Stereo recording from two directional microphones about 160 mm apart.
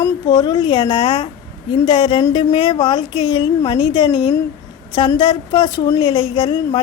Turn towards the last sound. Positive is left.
turn(degrees=25)  # may be behind; listen again after turning